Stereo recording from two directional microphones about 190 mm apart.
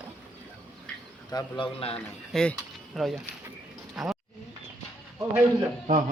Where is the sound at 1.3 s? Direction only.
30° left (ahead or behind).